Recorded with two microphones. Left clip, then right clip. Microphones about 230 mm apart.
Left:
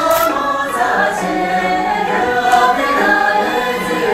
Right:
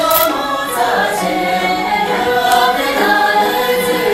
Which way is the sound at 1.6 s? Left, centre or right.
Right.